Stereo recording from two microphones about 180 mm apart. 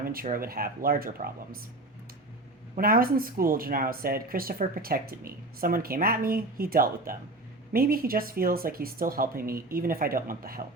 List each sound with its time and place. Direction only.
0.0 s speech: 55° right (ahead or behind)
2.7 s speech: 55° right (ahead or behind)